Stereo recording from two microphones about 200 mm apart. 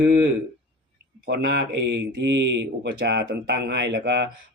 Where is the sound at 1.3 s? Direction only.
60° right (ahead or behind).